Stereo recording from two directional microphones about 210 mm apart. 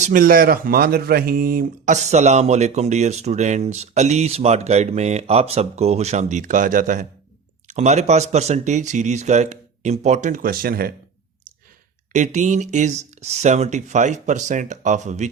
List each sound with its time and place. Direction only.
0.0 s speech: 40° right (ahead or behind)
12.1 s speech: 35° right (ahead or behind)